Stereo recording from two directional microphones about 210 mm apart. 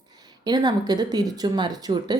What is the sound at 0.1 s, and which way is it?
Speech, 20° right (ahead or behind).